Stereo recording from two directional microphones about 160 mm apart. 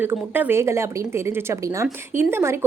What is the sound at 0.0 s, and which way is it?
A woman's voice, 10° right (ahead or behind).